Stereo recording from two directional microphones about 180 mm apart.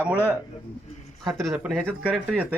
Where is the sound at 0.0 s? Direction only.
10° right (ahead or behind).